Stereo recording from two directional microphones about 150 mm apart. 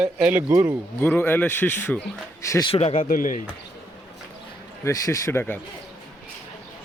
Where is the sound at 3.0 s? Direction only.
65° left (ahead or behind).